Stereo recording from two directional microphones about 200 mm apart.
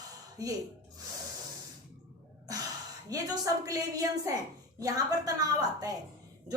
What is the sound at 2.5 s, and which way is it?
Gasp, 20° right (ahead or behind).